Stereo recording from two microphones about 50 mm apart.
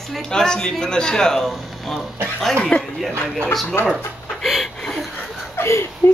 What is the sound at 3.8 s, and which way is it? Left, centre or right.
Speech, left.